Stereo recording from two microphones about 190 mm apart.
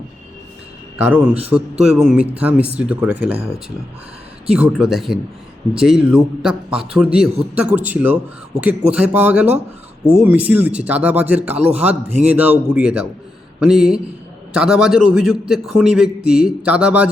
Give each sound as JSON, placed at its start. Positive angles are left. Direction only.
{"t": 1.0, "sound": "speech", "side_deg": -5}
{"t": 4.4, "sound": "a man's voice", "side_deg": -5}